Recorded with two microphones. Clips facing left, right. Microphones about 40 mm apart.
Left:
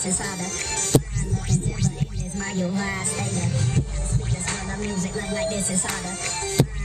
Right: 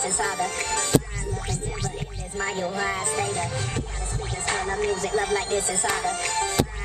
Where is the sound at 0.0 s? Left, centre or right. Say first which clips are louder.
Right 3 dB; right.